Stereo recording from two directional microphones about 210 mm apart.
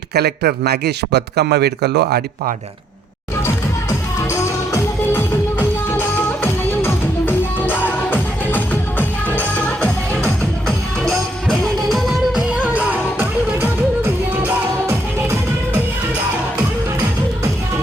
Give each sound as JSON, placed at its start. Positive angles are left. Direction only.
{"t": 0.1, "sound": "speech", "side_deg": -50}
{"t": 3.4, "sound": "music", "side_deg": 15}